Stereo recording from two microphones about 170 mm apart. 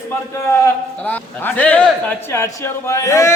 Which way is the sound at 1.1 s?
10° left (ahead or behind).